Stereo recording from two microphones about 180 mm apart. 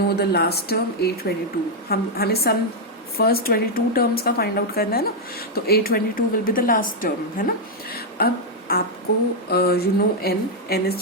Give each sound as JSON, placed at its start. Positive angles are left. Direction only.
{"t": 0.2, "sound": "a woman's voice", "side_deg": 60}